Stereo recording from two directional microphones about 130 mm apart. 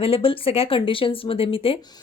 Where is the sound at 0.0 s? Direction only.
45° left (ahead or behind).